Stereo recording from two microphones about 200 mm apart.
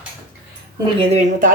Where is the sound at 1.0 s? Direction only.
35° right (ahead or behind).